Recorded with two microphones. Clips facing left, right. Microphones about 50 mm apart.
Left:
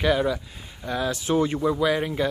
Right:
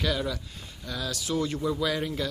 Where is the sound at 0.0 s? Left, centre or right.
Left.